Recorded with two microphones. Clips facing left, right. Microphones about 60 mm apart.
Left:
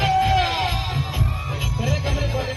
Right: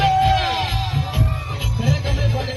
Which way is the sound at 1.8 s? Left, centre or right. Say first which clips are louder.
Right 3 dB; centre.